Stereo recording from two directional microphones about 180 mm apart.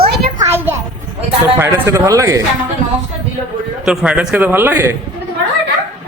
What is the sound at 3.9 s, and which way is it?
Speech, 5° right (ahead or behind).